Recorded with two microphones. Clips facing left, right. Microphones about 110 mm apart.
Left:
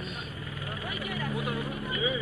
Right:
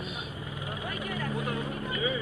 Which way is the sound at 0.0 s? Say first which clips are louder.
Right 1 dB; 5° right (ahead or behind).